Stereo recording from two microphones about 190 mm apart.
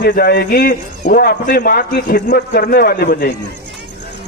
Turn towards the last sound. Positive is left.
turn(degrees=50)  # may be behind; listen again after turning